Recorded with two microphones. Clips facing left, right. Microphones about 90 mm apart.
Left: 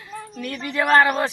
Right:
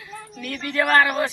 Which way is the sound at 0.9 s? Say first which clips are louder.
Left 3 dB; 25° left (ahead or behind).